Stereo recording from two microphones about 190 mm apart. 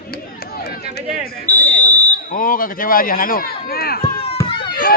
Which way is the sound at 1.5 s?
10° left (ahead or behind).